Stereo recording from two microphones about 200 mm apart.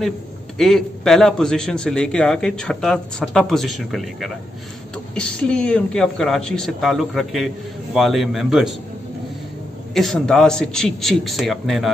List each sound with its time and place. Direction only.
0.6 s a man's voice: centre (ahead or behind)
9.9 s a man's voice: centre (ahead or behind)